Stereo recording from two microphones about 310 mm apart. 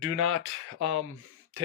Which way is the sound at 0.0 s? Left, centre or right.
Right.